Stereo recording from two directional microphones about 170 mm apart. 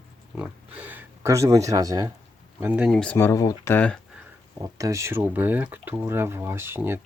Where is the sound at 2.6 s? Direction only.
10° right (ahead or behind).